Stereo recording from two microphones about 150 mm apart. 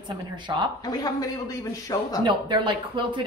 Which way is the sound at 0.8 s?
25° left (ahead or behind).